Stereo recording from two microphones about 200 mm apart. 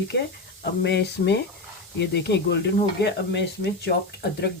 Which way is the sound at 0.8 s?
60° left (ahead or behind).